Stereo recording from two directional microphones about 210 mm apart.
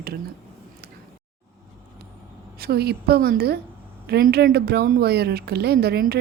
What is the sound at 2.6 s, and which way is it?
Speech, 50° right (ahead or behind).